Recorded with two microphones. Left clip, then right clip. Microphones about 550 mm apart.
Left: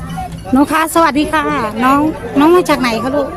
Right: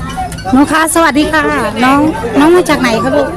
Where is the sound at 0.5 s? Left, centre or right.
Left.